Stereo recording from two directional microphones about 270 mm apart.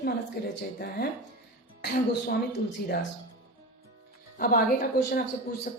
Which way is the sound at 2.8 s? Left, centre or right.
Left.